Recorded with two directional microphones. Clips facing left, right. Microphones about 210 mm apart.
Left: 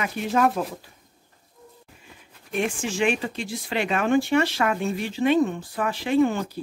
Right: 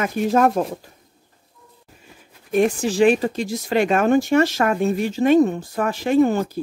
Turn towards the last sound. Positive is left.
turn(degrees=-40)  # may be behind; listen again after turning